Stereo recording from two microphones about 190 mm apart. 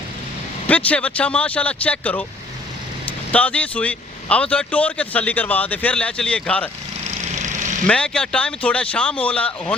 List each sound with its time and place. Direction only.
0.7 s speech: 5° left (ahead or behind)
7.1 s vehicle: 40° right (ahead or behind)
7.9 s speech: 5° left (ahead or behind)